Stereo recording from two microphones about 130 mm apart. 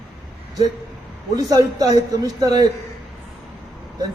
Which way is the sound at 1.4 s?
25° right (ahead or behind).